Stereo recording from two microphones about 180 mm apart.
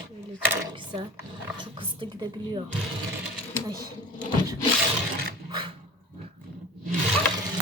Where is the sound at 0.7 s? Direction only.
25° right (ahead or behind).